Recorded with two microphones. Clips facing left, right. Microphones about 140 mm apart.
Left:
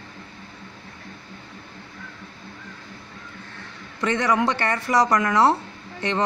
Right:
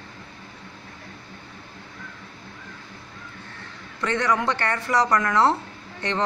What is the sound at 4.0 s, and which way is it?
Speech, 15° left (ahead or behind).